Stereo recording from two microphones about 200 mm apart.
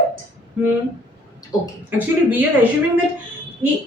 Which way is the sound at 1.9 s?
10° right (ahead or behind).